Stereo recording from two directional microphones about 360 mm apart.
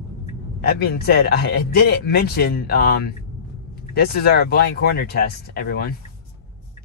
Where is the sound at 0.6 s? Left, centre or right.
Left.